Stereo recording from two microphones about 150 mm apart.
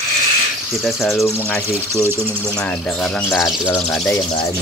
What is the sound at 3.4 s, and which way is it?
Speech, 25° left (ahead or behind).